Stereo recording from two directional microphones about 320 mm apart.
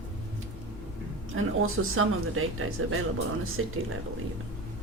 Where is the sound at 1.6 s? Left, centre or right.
Right.